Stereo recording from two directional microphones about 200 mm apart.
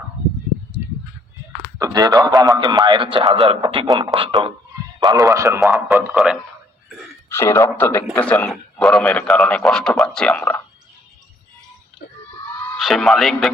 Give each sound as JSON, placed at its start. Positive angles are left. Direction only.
{"t": 1.8, "sound": "a man's voice", "side_deg": -20}
{"t": 7.3, "sound": "a man's voice", "side_deg": 15}
{"t": 12.6, "sound": "speech", "side_deg": 0}